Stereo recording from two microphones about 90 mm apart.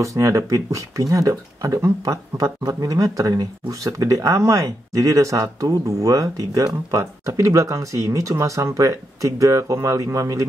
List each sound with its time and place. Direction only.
0.0 s speech: 35° right (ahead or behind)